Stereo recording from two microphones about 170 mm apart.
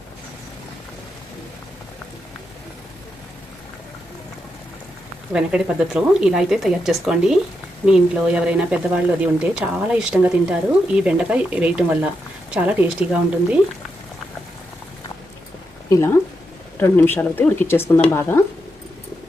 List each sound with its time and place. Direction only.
5.3 s a woman's voice: 5° right (ahead or behind)
15.9 s speech: 15° left (ahead or behind)